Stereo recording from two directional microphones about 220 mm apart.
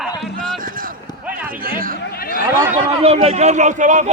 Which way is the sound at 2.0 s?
45° left (ahead or behind).